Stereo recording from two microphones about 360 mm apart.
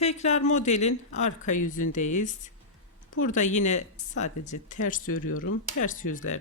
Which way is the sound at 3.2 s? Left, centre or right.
Left.